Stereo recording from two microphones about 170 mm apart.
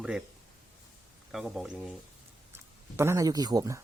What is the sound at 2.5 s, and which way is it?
Speech, 15° right (ahead or behind).